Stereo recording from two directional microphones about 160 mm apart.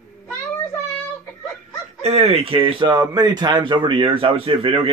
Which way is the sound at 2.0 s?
40° right (ahead or behind).